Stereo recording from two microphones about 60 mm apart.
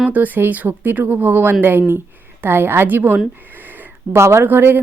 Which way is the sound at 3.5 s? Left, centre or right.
Right.